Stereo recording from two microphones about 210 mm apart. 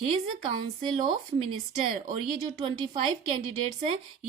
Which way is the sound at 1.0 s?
25° right (ahead or behind).